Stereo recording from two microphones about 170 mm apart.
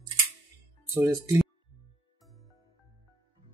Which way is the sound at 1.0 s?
20° right (ahead or behind).